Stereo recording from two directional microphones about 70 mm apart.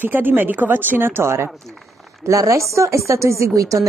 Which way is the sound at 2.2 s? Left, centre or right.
Right.